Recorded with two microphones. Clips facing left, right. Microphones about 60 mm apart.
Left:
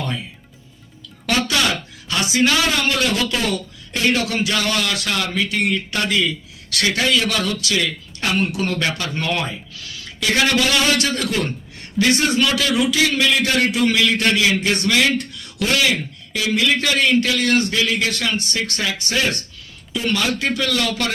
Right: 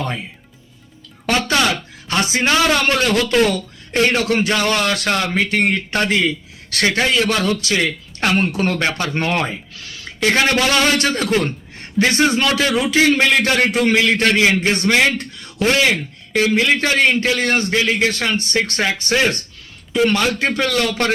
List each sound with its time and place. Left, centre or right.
2.0 s a man's voice: right